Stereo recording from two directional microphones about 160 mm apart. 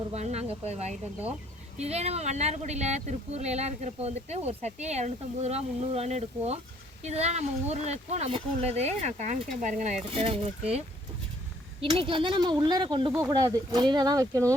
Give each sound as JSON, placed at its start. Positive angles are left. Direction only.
{"t": 0.1, "sound": "speech", "side_deg": -40}